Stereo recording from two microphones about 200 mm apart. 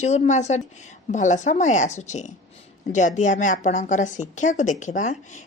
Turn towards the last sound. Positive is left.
turn(degrees=40)  # may be behind; listen again after turning